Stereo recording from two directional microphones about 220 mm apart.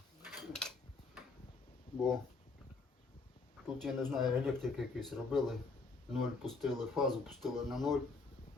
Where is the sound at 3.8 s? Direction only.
Centre (ahead or behind).